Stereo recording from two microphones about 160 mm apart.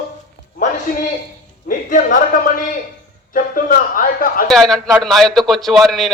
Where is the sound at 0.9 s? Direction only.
65° left (ahead or behind).